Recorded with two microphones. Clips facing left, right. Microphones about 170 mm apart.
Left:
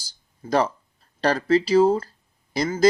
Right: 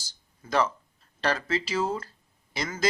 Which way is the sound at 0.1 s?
35° left (ahead or behind).